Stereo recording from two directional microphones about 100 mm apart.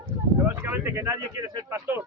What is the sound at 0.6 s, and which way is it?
Speech, 25° right (ahead or behind).